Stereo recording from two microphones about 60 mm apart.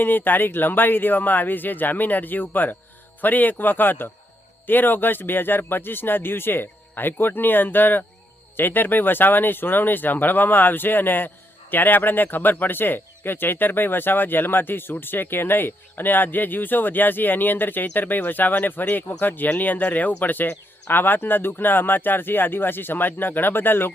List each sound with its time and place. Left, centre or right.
0.0 s speech: left